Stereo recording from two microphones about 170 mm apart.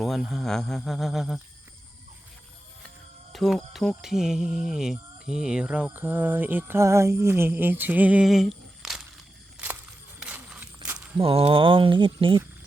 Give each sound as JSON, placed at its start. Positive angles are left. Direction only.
{"t": 0.0, "sound": "speech", "side_deg": 0}
{"t": 3.3, "sound": "speech", "side_deg": 0}
{"t": 10.2, "sound": "a sound", "side_deg": -5}
{"t": 11.2, "sound": "speech", "side_deg": -35}